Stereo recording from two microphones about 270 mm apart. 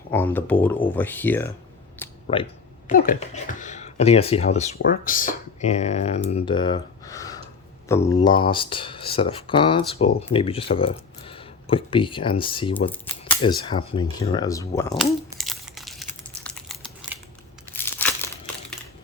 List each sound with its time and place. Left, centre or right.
0.1 s speech: centre
2.2 s speech: centre
2.8 s speech: left; by 14.9 s centre
14.9 s crumpling: centre